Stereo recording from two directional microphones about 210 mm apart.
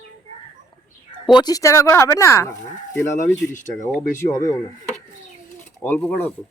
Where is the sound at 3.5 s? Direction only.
35° left (ahead or behind).